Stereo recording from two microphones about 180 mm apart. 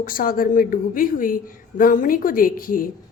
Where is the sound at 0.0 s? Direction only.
50° left (ahead or behind).